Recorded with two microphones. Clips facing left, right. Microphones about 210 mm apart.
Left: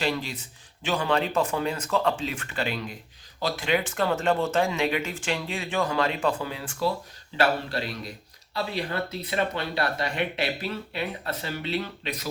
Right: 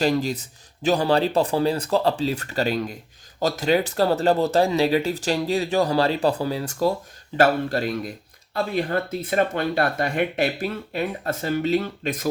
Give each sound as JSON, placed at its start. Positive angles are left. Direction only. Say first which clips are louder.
{"t": 0.0, "sound": "speech", "louder": "right 7 dB", "side_deg": -40}